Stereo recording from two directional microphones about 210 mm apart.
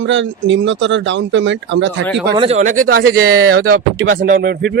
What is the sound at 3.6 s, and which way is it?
Speech, 65° right (ahead or behind).